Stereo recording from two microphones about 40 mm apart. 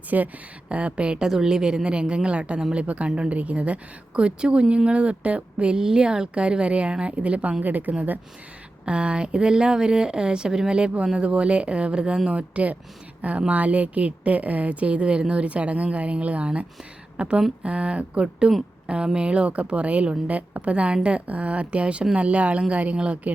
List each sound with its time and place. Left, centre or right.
0.1 s a woman's voice: right
0.7 s a woman's voice: right
1.3 s a woman's voice: centre; by 7.5 s right
7.6 s a woman's voice: right
8.8 s a woman's voice: right
12.3 s a woman's voice: right